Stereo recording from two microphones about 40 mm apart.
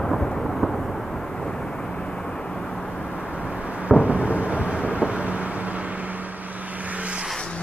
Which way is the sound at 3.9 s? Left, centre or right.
Right.